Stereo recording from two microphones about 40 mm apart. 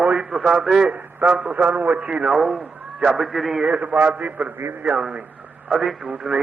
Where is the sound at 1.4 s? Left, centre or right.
Right.